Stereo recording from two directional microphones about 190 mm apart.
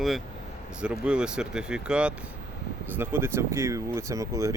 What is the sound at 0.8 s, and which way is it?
Speech, 5° right (ahead or behind).